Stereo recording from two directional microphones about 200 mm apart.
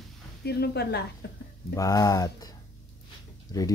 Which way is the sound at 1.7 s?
15° left (ahead or behind).